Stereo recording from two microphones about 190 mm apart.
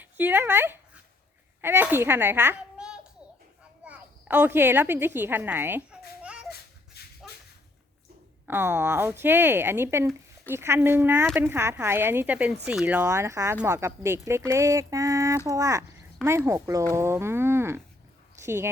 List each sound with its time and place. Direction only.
0.0 s a child's voice: 10° right (ahead or behind)
6.2 s a sound: 5° right (ahead or behind)
7.2 s whip: 5° right (ahead or behind)
8.4 s speech: 10° right (ahead or behind)